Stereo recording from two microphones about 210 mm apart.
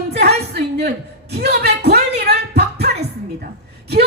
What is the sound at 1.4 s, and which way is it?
Speech, 50° right (ahead or behind).